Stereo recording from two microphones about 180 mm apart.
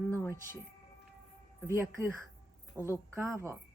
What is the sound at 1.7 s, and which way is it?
A woman's voice, 15° right (ahead or behind).